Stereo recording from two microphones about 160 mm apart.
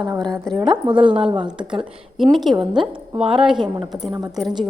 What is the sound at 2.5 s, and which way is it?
Speech, 30° right (ahead or behind).